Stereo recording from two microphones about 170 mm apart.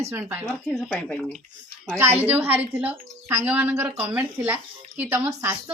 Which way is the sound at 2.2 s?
10° right (ahead or behind).